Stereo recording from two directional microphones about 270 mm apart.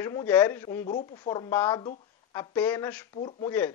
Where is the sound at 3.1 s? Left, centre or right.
Centre.